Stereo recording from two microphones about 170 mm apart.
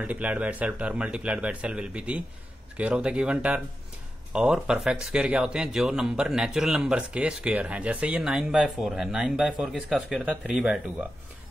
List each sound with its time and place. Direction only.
0.0 s speech: 10° right (ahead or behind)